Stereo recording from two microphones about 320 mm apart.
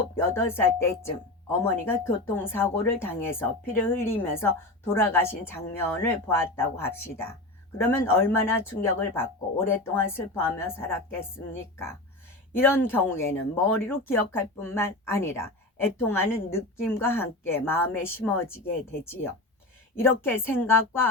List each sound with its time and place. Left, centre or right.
0.2 s speech: centre
12.5 s speech: centre
20.0 s speech: centre